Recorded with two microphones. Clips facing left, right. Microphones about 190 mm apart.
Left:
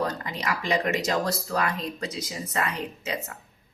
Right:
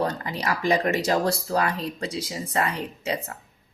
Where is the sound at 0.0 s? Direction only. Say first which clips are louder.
Right 2 dB; 35° right (ahead or behind).